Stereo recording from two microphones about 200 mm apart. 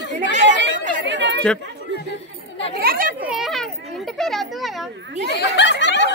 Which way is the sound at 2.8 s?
50° right (ahead or behind).